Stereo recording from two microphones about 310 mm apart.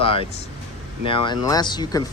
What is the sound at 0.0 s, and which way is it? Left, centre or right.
Speech, centre.